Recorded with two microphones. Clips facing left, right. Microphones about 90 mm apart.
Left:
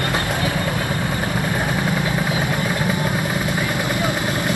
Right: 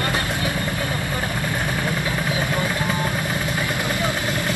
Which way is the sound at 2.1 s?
20° left (ahead or behind).